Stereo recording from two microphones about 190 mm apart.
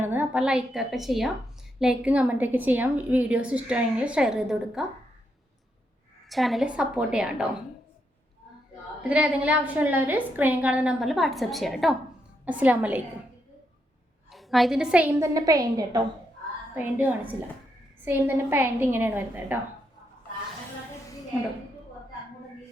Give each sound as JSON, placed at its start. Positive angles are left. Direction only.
{"t": 0.0, "sound": "a woman's voice", "side_deg": -10}
{"t": 6.2, "sound": "a woman's voice", "side_deg": 0}
{"t": 9.0, "sound": "a woman's voice", "side_deg": -5}
{"t": 14.3, "sound": "a woman's voice", "side_deg": 0}
{"t": 16.7, "sound": "a woman's voice", "side_deg": -10}